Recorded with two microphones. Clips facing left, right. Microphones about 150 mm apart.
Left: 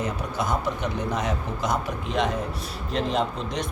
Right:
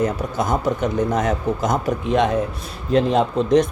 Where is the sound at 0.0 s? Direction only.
45° right (ahead or behind).